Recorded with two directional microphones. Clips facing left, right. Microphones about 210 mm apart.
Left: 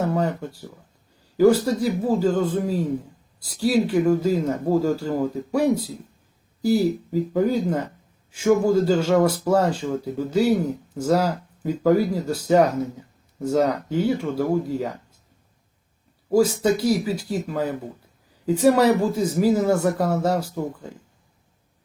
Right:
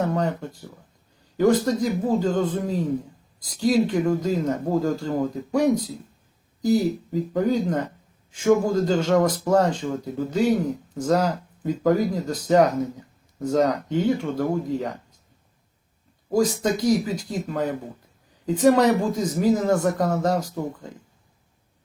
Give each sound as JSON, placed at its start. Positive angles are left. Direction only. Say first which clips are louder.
{"t": 0.0, "sound": "a man's voice", "louder": "left 1 dB", "side_deg": 5}
{"t": 16.3, "sound": "a man's voice", "louder": "left 3 dB", "side_deg": 5}